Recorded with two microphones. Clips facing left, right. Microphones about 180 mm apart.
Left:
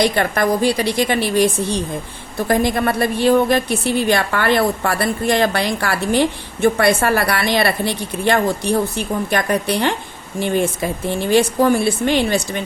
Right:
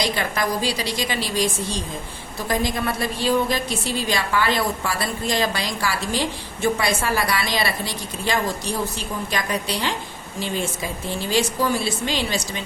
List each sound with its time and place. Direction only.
0.0 s a woman's voice: 55° left (ahead or behind)